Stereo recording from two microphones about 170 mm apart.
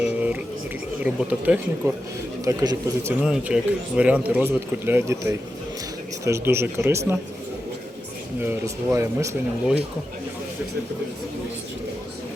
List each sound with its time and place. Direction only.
0.0 s music: 10° right (ahead or behind)
1.0 s speech: 10° right (ahead or behind)
2.4 s a man's voice: 20° right (ahead or behind)
3.2 s speech: 5° right (ahead or behind)
8.4 s speech: 15° right (ahead or behind)